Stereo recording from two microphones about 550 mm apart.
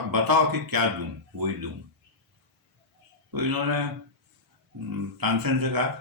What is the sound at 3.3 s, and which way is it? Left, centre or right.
Speech, right.